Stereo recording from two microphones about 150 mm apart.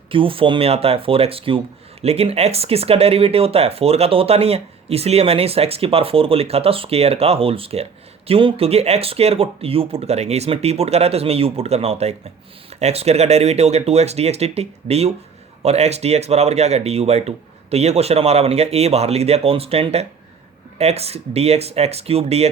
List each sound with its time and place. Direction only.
0.1 s speech: 35° right (ahead or behind)